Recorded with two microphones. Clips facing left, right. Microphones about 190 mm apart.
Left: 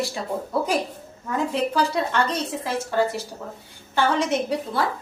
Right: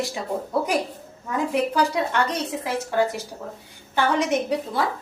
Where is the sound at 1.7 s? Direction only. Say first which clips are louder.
Even; 15° right (ahead or behind).